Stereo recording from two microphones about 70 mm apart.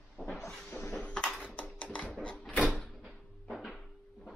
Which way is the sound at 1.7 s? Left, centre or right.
Left.